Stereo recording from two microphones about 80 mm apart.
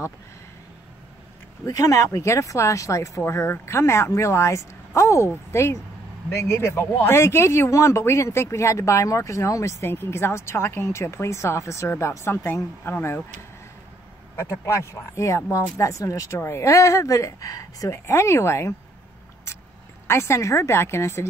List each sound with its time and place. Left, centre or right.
1.7 s speech: left
12.8 s speech: left
14.3 s speech: left
20.1 s speech: left